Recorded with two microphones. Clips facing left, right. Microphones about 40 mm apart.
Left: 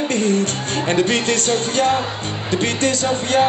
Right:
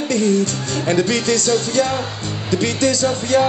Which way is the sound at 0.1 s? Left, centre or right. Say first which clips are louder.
Right 5 dB; left.